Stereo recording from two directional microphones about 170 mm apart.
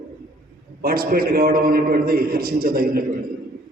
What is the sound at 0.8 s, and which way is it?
A man's voice, 60° right (ahead or behind).